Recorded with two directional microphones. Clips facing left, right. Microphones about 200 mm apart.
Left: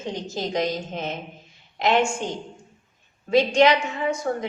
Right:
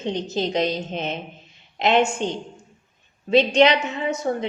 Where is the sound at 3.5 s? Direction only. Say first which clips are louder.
Right 1 dB; 20° right (ahead or behind).